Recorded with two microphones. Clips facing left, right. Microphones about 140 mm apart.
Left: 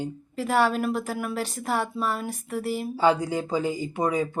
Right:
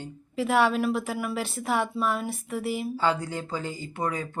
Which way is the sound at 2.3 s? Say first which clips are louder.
Left 1 dB; 40° left (ahead or behind).